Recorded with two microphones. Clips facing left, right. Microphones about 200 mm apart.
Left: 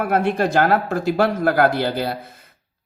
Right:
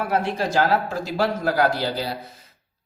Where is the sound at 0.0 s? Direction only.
55° left (ahead or behind).